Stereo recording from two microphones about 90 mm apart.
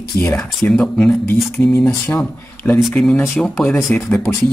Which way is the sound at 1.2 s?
30° left (ahead or behind).